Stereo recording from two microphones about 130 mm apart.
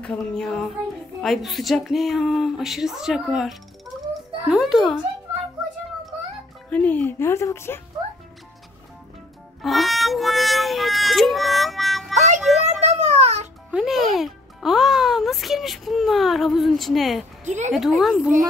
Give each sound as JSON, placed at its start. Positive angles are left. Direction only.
{"t": 0.0, "sound": "speech", "side_deg": 5}
{"t": 6.7, "sound": "speech", "side_deg": 10}
{"t": 9.6, "sound": "music", "side_deg": 0}
{"t": 12.4, "sound": "a sound", "side_deg": 0}
{"t": 12.6, "sound": "a sound", "side_deg": -60}
{"t": 13.7, "sound": "music", "side_deg": -5}
{"t": 17.5, "sound": "a woman's voice", "side_deg": -65}
{"t": 17.7, "sound": "speech", "side_deg": 0}